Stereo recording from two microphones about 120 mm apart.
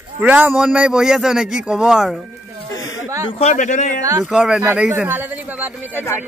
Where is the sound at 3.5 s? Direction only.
90° left.